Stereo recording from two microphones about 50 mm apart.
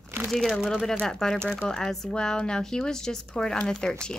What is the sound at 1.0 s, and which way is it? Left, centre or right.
Speech, centre.